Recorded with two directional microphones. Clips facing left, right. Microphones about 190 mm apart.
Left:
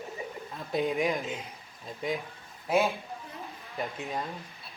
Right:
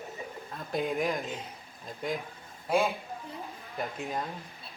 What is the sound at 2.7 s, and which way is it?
Speech, 5° left (ahead or behind).